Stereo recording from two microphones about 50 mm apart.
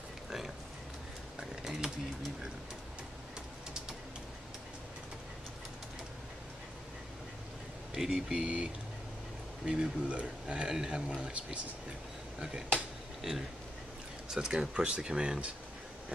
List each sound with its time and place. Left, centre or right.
1.5 s a sound: centre
7.9 s speech: centre
9.7 s speech: right
11.1 s speech: right
14.3 s speech: centre